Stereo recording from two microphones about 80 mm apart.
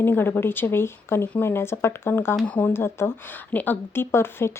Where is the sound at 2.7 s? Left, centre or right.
Left.